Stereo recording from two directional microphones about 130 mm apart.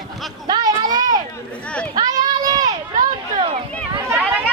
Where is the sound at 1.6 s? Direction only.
10° left (ahead or behind).